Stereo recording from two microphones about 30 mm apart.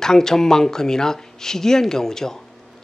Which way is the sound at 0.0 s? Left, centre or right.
Centre.